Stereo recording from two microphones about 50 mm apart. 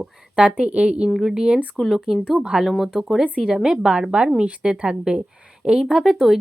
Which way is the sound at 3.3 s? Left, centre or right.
Centre.